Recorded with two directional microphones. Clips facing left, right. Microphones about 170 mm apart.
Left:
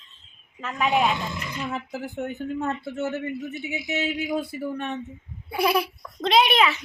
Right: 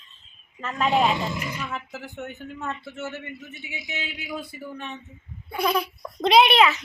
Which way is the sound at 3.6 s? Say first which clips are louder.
Left 7 dB; 40° left (ahead or behind).